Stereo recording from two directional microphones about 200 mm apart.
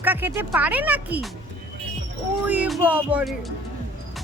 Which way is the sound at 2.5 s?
5° right (ahead or behind).